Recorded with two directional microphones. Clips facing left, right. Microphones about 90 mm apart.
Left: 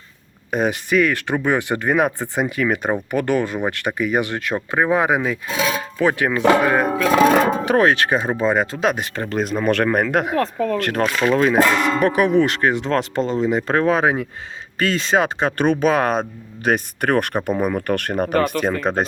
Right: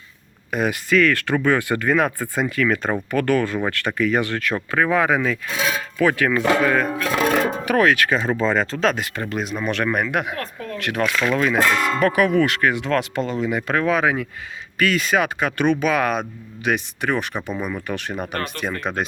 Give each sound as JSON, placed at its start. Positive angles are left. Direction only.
{"t": 0.5, "sound": "speech", "side_deg": 25}
{"t": 6.8, "sound": "speech", "side_deg": 85}
{"t": 7.6, "sound": "speech", "side_deg": 25}
{"t": 9.3, "sound": "speech", "side_deg": 40}
{"t": 16.6, "sound": "speech", "side_deg": 45}